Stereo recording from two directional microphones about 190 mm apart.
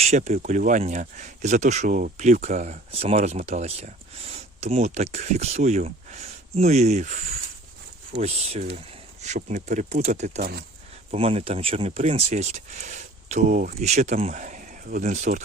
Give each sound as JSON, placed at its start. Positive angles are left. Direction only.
{"t": 0.0, "sound": "speech", "side_deg": -35}
{"t": 8.2, "sound": "speech", "side_deg": -35}